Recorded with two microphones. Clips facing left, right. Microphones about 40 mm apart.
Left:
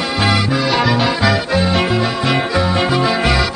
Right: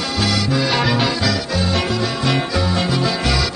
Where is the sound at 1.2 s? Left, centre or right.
Left.